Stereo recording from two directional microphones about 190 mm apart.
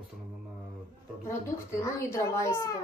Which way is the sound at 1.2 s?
15° left (ahead or behind).